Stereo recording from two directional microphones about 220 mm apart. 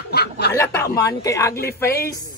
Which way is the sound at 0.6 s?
15° left (ahead or behind).